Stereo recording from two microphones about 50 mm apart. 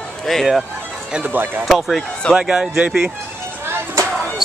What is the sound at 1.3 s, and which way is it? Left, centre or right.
Speech, right.